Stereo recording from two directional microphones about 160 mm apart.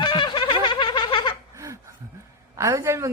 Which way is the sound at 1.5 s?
20° right (ahead or behind).